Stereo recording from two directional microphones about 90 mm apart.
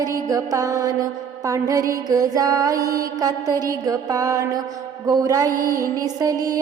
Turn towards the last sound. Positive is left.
turn(degrees=-45)  # may be behind; listen again after turning